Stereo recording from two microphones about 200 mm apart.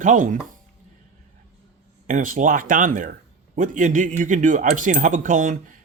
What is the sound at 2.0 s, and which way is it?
Speech, 40° right (ahead or behind).